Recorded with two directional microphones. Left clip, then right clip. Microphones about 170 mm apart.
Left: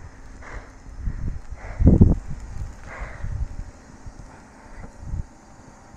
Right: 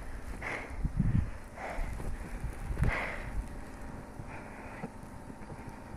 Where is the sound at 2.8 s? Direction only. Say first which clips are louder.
Right 4 dB; 40° right (ahead or behind).